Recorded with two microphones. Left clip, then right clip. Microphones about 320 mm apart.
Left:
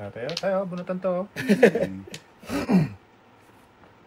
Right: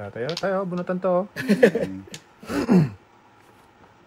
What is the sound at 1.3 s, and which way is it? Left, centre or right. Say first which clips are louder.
Speech: left 3 dB; centre.